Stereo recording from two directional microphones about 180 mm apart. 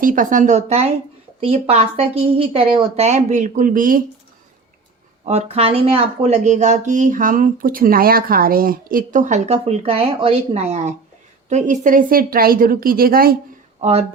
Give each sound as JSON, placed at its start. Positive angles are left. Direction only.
{"t": 0.0, "sound": "a woman's voice", "side_deg": -50}
{"t": 5.3, "sound": "a woman's voice", "side_deg": -35}
{"t": 13.8, "sound": "speech", "side_deg": -40}